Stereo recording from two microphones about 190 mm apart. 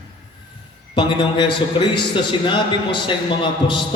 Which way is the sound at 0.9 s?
25° left (ahead or behind).